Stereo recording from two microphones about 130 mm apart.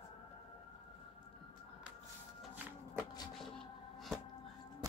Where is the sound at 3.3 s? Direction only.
Centre (ahead or behind).